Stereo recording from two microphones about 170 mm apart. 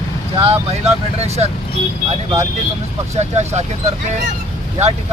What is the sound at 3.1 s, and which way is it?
Speech, 40° right (ahead or behind).